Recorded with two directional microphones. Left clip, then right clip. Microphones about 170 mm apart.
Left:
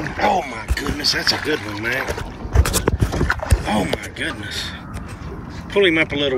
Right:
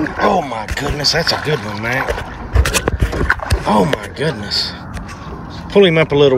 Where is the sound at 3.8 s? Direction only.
20° right (ahead or behind).